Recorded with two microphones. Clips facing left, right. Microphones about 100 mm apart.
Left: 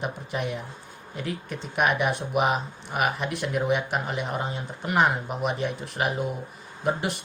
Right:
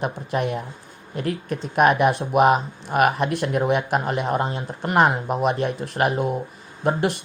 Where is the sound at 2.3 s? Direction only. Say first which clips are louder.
Right 7 dB; 50° right (ahead or behind).